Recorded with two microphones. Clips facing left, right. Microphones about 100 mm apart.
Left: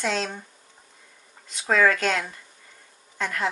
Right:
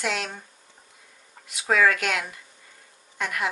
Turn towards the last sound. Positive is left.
turn(degrees=-15)  # may be behind; listen again after turning